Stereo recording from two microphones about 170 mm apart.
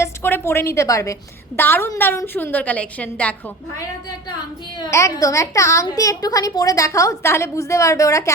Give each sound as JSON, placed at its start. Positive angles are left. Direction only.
{"t": 0.0, "sound": "a woman's voice", "side_deg": 15}
{"t": 4.8, "sound": "a woman's voice", "side_deg": 15}